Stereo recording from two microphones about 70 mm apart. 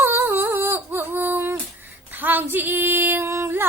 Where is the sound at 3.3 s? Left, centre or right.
Right.